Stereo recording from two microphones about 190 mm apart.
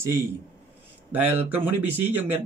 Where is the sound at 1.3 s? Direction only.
10° right (ahead or behind).